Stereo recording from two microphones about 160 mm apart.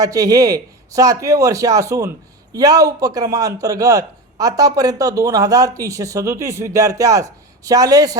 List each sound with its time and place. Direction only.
0.0 s a man's voice: 20° right (ahead or behind)